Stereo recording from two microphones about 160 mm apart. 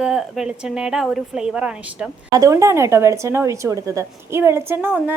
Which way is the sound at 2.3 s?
20° right (ahead or behind).